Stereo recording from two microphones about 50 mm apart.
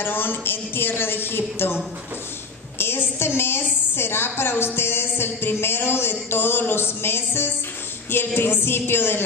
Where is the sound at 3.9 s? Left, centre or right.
Left.